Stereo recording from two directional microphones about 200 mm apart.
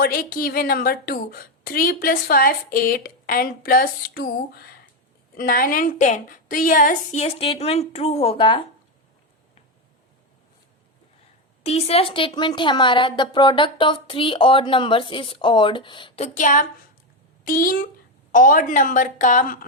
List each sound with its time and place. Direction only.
0.0 s a woman's voice: 45° left (ahead or behind); by 8.6 s 25° left (ahead or behind)
11.6 s a woman's voice: 30° left (ahead or behind)